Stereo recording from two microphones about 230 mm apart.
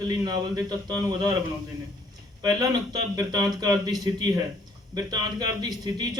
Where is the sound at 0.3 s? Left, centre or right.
Centre.